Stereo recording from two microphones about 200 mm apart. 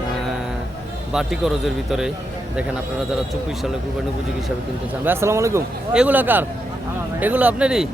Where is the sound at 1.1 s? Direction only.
Centre (ahead or behind).